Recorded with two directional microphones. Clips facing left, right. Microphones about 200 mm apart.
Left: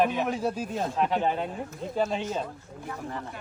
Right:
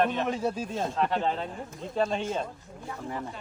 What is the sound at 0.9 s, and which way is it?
A man's voice, 15° left (ahead or behind).